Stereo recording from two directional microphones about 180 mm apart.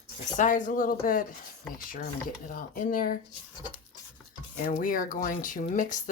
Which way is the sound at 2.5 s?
50° left (ahead or behind).